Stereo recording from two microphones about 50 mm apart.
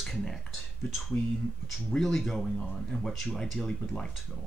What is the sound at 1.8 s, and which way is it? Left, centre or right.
Speech, centre.